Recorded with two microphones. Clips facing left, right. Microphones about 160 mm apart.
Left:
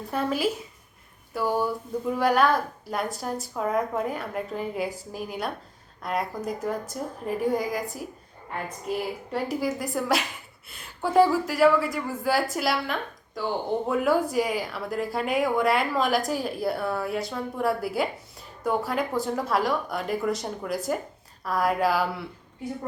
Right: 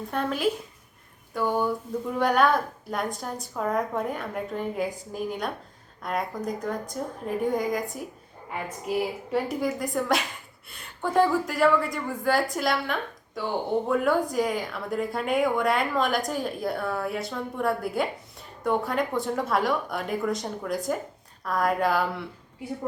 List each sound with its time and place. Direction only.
0.1 s a woman's voice: 5° left (ahead or behind)
9.3 s a woman's voice: 5° left (ahead or behind)